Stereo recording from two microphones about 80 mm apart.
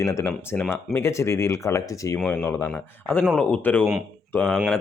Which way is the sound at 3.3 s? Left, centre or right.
Left.